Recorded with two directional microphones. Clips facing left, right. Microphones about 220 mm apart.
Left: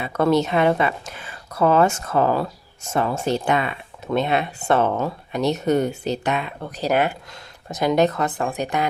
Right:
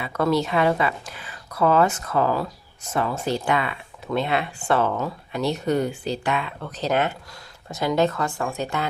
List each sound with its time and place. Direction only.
0.2 s speech: 25° left (ahead or behind)